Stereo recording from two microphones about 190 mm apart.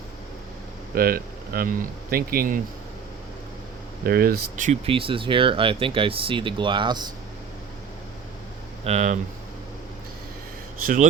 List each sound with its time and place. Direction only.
0.9 s speech: 50° right (ahead or behind)
4.0 s speech: 55° right (ahead or behind)
4.9 s speech: 30° right (ahead or behind)
8.8 s speech: 35° right (ahead or behind)